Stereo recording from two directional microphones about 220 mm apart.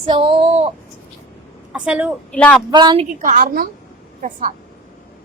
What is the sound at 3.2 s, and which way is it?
A woman's voice, 35° right (ahead or behind).